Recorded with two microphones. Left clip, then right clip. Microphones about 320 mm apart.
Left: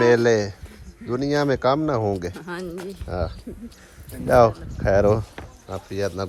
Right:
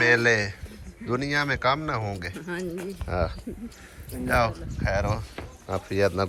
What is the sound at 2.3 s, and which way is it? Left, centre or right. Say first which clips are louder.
Speech: left 1 dB; centre.